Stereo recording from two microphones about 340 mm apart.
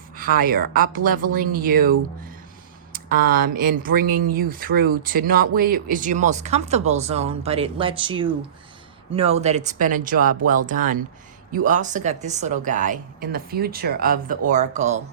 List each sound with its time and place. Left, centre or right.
0.2 s a woman's voice: right
2.9 s speech: right